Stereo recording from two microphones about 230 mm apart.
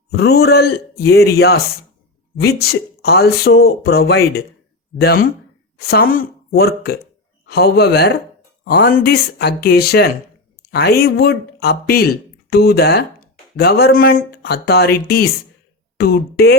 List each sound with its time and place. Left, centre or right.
0.1 s a woman's voice: left